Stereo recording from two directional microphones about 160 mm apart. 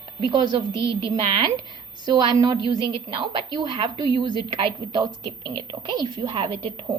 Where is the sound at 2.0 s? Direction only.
25° right (ahead or behind).